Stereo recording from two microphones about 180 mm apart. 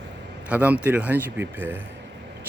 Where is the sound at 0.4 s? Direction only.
10° right (ahead or behind).